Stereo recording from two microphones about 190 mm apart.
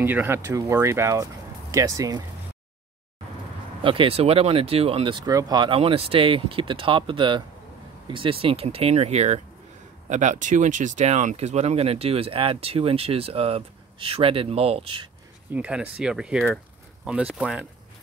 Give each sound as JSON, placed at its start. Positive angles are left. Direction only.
{"t": 0.0, "sound": "speech", "side_deg": -10}
{"t": 3.8, "sound": "speech", "side_deg": -25}
{"t": 15.5, "sound": "speech", "side_deg": -5}